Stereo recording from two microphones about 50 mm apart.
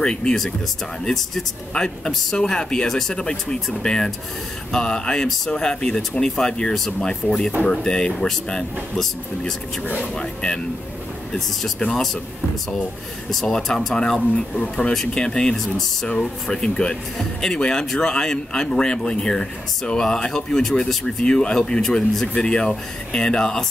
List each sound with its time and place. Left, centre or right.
0.0 s speech: centre
1.0 s speech: centre
1.7 s speech: centre
13.3 s speech: centre
14.5 s speech: centre